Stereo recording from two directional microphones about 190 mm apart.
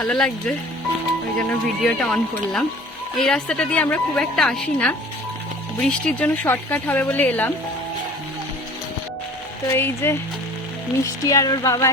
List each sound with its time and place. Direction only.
0.0 s a woman's voice: centre (ahead or behind)
9.7 s speech: 10° left (ahead or behind)